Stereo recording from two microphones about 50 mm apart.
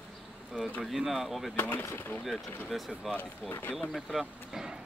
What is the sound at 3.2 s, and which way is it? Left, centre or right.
Speech, left.